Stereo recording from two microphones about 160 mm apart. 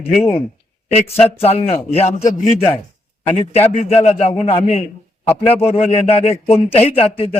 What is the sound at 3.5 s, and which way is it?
A man's voice, 40° left (ahead or behind).